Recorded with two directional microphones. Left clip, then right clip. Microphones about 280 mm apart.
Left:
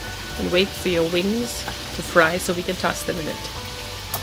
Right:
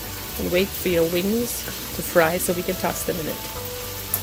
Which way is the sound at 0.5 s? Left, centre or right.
Centre.